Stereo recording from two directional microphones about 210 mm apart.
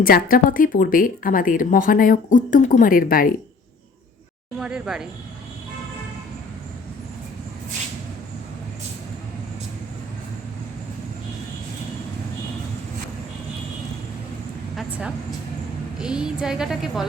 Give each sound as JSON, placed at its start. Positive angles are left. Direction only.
{"t": 0.0, "sound": "speech", "side_deg": 45}
{"t": 4.6, "sound": "a woman's voice", "side_deg": -5}
{"t": 14.8, "sound": "a woman's voice", "side_deg": -5}